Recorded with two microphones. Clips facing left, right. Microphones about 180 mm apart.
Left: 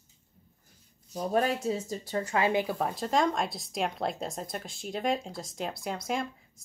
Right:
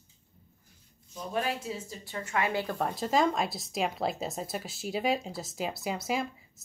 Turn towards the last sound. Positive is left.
turn(degrees=-5)  # may be behind; listen again after turning